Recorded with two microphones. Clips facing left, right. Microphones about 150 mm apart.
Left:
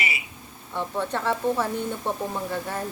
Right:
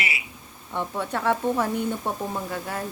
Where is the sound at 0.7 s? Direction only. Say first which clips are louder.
Even; 10° right (ahead or behind).